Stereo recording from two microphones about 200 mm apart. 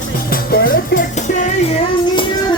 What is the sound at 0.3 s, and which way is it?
Music, 45° left (ahead or behind).